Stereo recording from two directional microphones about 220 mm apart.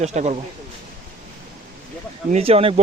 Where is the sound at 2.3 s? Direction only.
30° right (ahead or behind).